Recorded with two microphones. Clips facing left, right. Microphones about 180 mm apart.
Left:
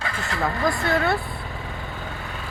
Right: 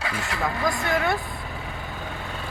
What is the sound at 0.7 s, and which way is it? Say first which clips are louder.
Speech: left 2 dB; 10° right (ahead or behind).